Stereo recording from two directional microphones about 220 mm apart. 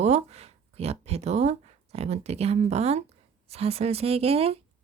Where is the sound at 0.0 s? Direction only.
30° right (ahead or behind).